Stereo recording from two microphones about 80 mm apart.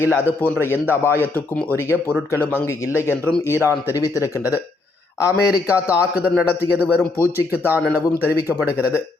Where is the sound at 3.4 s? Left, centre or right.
Left.